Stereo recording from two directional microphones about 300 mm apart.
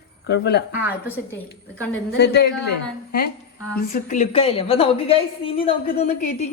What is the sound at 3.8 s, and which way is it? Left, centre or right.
A woman's voice, left.